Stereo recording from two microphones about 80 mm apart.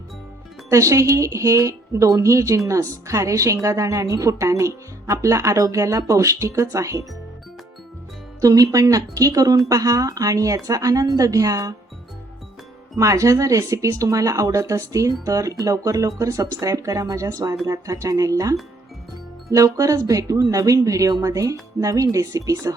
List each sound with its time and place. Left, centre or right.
0.7 s speech: right
8.4 s speech: right
13.0 s speech: right